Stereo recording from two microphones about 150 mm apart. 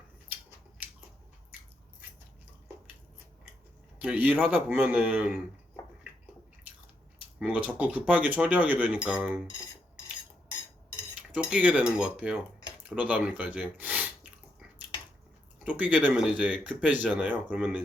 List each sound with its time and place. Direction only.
3.9 s speech: 10° right (ahead or behind)
7.3 s speech: 10° right (ahead or behind)
11.3 s speech: 10° right (ahead or behind)
15.6 s speech: 10° right (ahead or behind)